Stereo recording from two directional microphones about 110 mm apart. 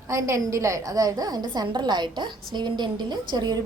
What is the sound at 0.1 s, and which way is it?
A woman's voice, 25° right (ahead or behind).